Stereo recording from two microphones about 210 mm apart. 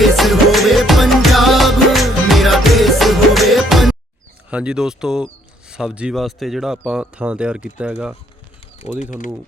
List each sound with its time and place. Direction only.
0.0 s music: centre (ahead or behind)
4.4 s speech: 5° right (ahead or behind)
9.0 s speech: 40° left (ahead or behind)